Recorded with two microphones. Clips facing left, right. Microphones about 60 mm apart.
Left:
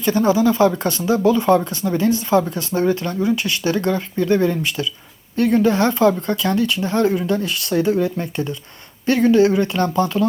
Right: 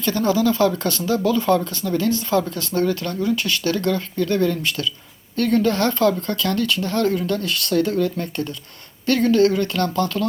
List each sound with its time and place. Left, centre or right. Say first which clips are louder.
0.0 s speech: left 3 dB; centre